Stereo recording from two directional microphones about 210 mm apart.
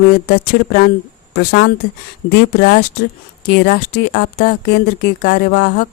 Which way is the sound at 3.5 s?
50° left (ahead or behind).